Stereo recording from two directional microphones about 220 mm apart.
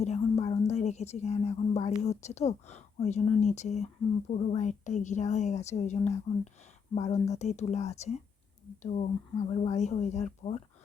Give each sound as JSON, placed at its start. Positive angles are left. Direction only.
{"t": 0.0, "sound": "whispering", "side_deg": 30}
{"t": 2.0, "sound": "a woman's voice", "side_deg": 30}